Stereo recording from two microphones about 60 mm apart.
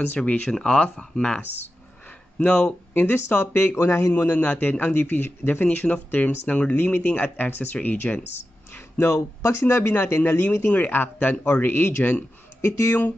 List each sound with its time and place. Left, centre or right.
0.1 s speech: left
2.9 s speech: left
3.7 s speech: left
4.4 s speech: left
6.7 s speech: left
8.7 s speech: left
10.7 s speech: left
12.6 s speech: left